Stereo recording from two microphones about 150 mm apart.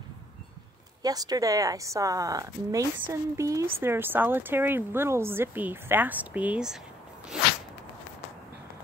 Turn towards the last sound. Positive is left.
turn(degrees=-5)  # may be behind; listen again after turning